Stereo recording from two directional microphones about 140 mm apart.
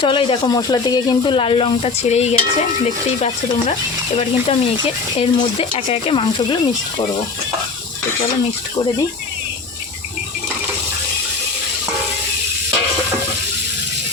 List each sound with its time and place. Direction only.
0.0 s speech: 40° left (ahead or behind)